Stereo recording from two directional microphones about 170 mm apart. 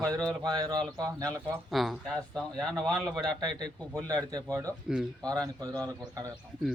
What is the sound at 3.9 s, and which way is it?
A man's voice, 20° right (ahead or behind).